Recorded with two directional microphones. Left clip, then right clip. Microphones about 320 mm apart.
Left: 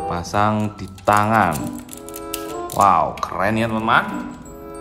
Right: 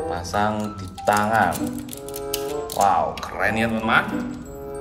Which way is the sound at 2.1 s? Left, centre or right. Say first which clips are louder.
Right 2 dB; centre.